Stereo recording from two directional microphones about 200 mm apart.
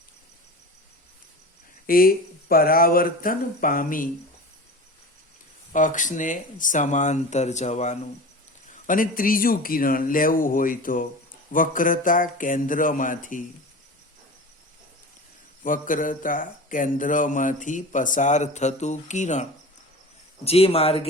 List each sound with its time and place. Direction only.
1.9 s speech: 45° left (ahead or behind)
5.7 s speech: 40° left (ahead or behind)
15.6 s speech: 40° left (ahead or behind)